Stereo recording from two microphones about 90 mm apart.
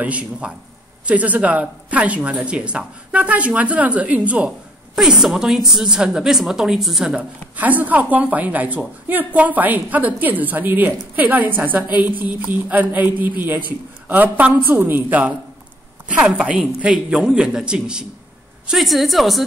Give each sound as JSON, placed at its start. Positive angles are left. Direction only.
{"t": 0.0, "sound": "speech", "side_deg": -15}